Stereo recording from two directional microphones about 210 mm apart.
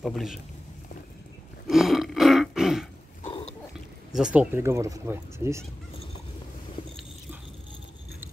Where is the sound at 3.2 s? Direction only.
30° left (ahead or behind).